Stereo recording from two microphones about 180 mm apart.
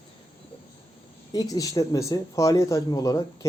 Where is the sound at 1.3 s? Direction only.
20° left (ahead or behind).